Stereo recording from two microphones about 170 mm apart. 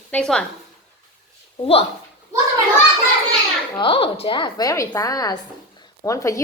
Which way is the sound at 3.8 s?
30° left (ahead or behind).